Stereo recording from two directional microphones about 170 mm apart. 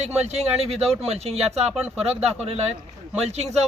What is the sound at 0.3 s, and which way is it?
Speech, 40° right (ahead or behind).